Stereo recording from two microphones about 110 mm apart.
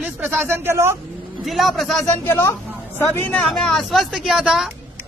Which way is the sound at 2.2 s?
25° left (ahead or behind).